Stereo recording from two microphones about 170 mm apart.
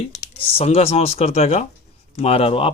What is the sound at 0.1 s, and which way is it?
A man's voice, 40° left (ahead or behind).